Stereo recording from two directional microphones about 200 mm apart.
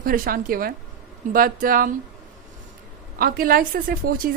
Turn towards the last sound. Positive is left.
turn(degrees=-45)  # may be behind; listen again after turning